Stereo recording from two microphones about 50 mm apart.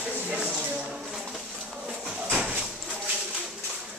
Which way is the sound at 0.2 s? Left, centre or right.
Centre.